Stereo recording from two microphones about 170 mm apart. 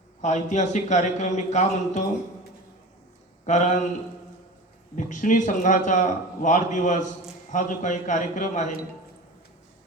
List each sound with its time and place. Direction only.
0.2 s a man's voice: 45° left (ahead or behind)
3.4 s speech: 45° left (ahead or behind)
4.9 s a man's voice: 50° left (ahead or behind)